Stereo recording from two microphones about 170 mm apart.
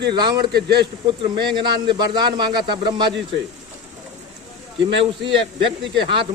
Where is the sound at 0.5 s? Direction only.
75° right (ahead or behind).